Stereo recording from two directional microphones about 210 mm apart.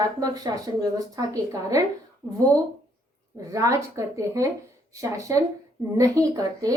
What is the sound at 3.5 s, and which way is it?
A woman's voice, 15° right (ahead or behind).